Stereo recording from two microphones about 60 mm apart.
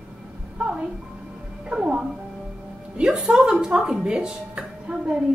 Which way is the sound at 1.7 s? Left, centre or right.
Centre.